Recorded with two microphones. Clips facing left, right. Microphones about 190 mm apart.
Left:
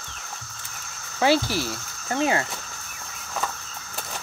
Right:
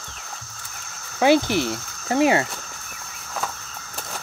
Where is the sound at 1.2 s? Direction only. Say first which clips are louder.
Right 4 dB; 20° right (ahead or behind).